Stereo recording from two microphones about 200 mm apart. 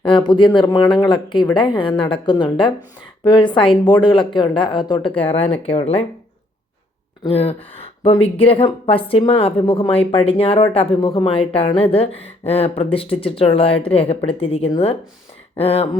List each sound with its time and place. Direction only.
0.0 s speech: 25° left (ahead or behind)
7.3 s speech: 30° left (ahead or behind)